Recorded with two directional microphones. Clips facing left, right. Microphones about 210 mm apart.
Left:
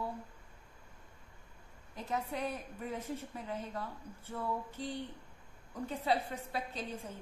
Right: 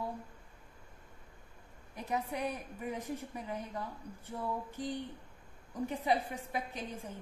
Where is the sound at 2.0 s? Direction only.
15° right (ahead or behind).